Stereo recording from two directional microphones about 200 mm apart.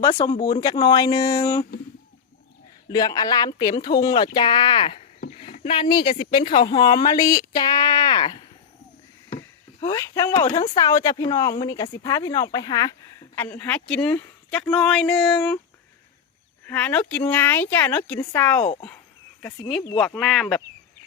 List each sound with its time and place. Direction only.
0.2 s speech: 15° left (ahead or behind)
2.9 s speech: 20° left (ahead or behind)
9.8 s speech: 15° left (ahead or behind)
10.4 s speech: 25° left (ahead or behind); by 15.5 s 5° left (ahead or behind)
16.6 s speech: 10° left (ahead or behind)
20.0 s speech: centre (ahead or behind)